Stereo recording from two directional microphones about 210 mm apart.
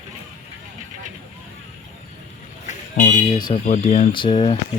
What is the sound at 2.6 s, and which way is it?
Vehicle, 35° left (ahead or behind).